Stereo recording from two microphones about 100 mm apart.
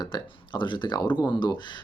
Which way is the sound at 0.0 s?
50° left (ahead or behind).